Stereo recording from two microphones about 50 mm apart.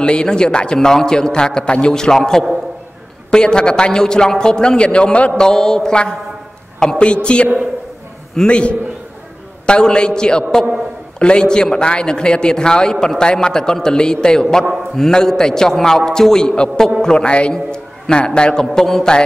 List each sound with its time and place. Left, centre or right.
0.0 s a man's voice: centre
5.4 s a man's voice: centre
8.5 s a man's voice: left; by 19.1 s centre